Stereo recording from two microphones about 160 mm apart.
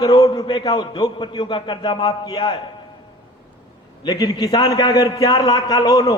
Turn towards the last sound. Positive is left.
turn(degrees=25)  # may be behind; listen again after turning